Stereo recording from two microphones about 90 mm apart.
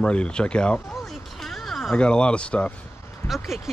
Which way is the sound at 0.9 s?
Centre (ahead or behind).